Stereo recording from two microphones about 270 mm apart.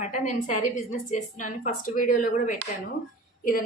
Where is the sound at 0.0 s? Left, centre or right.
Left.